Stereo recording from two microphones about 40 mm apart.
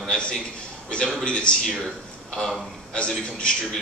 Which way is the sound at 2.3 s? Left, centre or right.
Centre.